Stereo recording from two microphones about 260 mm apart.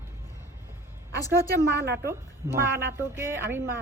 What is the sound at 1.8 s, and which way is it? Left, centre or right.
Speech, right.